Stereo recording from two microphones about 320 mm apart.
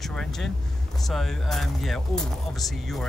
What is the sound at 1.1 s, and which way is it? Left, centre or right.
Speech, centre.